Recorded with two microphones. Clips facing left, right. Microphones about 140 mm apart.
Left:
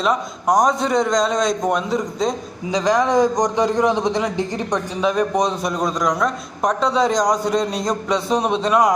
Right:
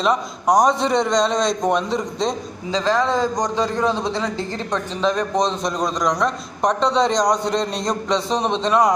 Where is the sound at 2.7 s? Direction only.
15° left (ahead or behind).